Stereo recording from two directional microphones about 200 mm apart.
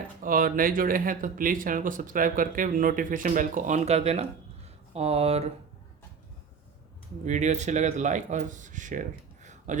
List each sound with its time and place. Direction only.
0.2 s speech: 45° right (ahead or behind)
7.3 s speech: 35° right (ahead or behind)